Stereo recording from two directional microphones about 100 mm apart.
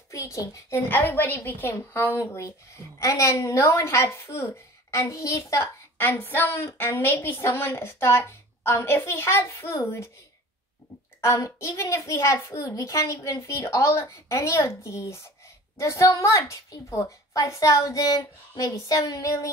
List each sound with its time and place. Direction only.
0.1 s a child's voice: 35° left (ahead or behind)
5.9 s a child's voice: 20° left (ahead or behind)
11.1 s a child's voice: 30° left (ahead or behind)